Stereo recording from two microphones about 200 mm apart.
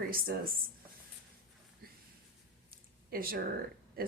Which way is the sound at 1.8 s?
50° right (ahead or behind).